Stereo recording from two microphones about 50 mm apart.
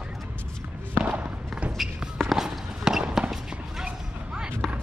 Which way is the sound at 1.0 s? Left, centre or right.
Right.